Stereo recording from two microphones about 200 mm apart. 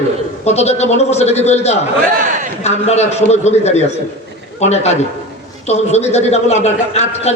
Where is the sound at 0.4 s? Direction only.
35° left (ahead or behind).